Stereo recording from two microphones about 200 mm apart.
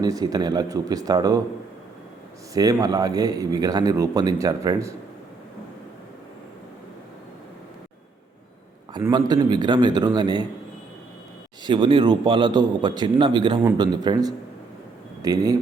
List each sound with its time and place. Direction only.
0.0 s speech: 20° right (ahead or behind)
2.5 s speech: 15° right (ahead or behind)
8.9 s speech: 20° right (ahead or behind)
11.6 s speech: 25° right (ahead or behind)